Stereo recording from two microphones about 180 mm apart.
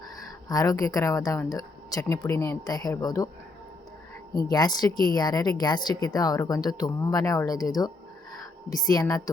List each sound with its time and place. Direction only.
0.4 s speech: 20° left (ahead or behind)
4.5 s speech: 20° left (ahead or behind)